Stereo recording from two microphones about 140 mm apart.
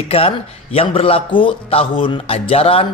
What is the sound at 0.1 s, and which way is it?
A man's voice, 45° left (ahead or behind).